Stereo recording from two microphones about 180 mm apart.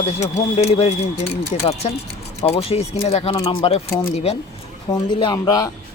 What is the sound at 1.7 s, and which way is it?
Speech, 25° left (ahead or behind).